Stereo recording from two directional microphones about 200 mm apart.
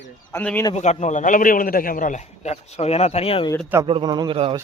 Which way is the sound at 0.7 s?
35° left (ahead or behind).